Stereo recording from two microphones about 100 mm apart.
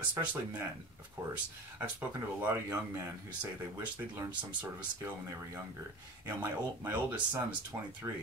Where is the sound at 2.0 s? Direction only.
15° right (ahead or behind).